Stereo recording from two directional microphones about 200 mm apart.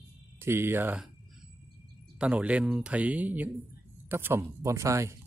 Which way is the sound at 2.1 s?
5° right (ahead or behind).